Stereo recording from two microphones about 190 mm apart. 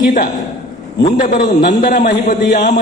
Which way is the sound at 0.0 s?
50° left (ahead or behind).